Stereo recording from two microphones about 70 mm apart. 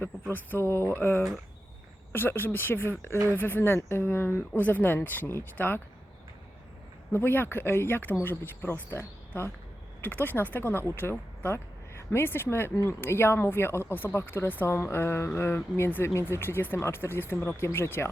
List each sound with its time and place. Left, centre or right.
0.3 s speech: left
7.1 s speech: left
12.7 s speech: left